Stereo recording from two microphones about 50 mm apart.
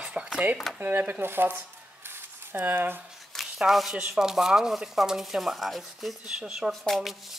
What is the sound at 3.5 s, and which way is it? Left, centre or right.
Speech, centre.